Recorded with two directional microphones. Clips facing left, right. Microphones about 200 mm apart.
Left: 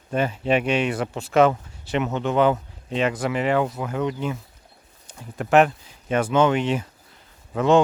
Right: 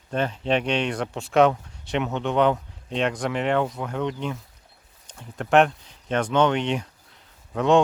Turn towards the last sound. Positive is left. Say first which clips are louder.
# left 1 dB
turn(degrees=0)  # may be behind; listen again after turning